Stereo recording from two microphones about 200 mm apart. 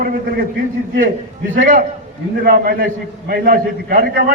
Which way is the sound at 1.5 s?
45° right (ahead or behind).